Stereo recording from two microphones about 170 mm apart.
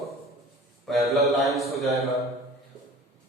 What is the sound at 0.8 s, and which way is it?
Speech, centre (ahead or behind).